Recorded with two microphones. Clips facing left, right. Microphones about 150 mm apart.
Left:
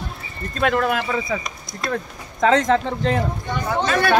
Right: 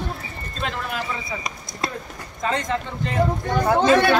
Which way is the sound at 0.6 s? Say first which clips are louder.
Left 10 dB; 65° left (ahead or behind).